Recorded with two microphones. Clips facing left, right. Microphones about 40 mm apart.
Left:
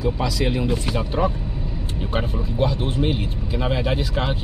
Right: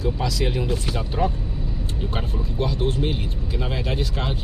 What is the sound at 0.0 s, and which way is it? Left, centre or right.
Speech, centre.